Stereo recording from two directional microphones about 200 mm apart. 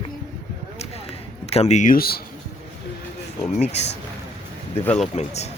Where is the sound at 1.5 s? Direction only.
30° left (ahead or behind).